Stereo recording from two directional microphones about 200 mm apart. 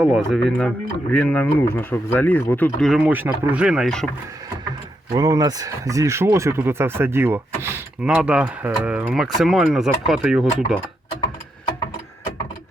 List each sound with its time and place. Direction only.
0.0 s speech: 5° right (ahead or behind)
2.9 s speech: 10° right (ahead or behind)
5.1 s speech: 15° right (ahead or behind)